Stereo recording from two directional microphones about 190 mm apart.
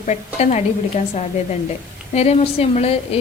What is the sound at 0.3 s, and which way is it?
A woman's voice, 35° left (ahead or behind).